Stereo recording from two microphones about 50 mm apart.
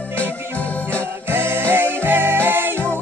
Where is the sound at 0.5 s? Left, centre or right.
Left.